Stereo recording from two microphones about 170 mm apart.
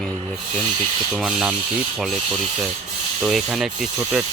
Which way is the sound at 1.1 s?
Centre (ahead or behind).